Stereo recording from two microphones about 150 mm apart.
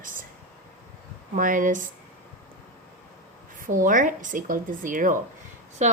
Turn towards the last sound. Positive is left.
turn(degrees=-50)  # may be behind; listen again after turning